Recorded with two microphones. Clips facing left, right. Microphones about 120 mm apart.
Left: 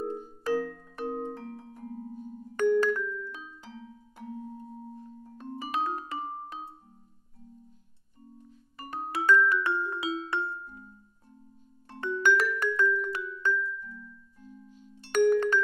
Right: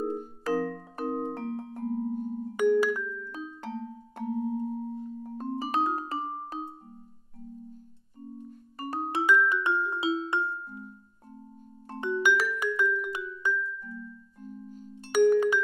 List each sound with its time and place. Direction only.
0.5 s music: 40° right (ahead or behind)
1.3 s music: 65° right (ahead or behind)
2.5 s music: 10° right (ahead or behind)
3.6 s music: 60° right (ahead or behind); by 6.7 s 30° right (ahead or behind)
8.5 s music: 40° right (ahead or behind)
9.1 s music: 15° right (ahead or behind)
12.0 s music: 15° right (ahead or behind)
14.4 s music: 45° right (ahead or behind)
15.0 s music: 10° right (ahead or behind)